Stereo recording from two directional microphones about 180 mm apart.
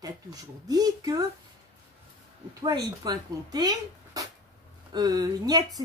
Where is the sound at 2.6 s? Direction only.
25° right (ahead or behind).